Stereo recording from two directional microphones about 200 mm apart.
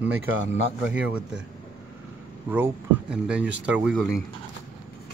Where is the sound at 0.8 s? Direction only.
5° right (ahead or behind).